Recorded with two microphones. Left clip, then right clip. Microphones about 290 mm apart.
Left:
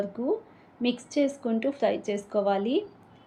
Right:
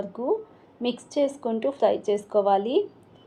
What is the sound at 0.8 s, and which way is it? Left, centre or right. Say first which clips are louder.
Speech: right 2 dB; centre.